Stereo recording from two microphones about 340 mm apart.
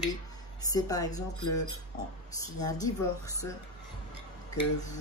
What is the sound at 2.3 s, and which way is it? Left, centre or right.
Speech, centre.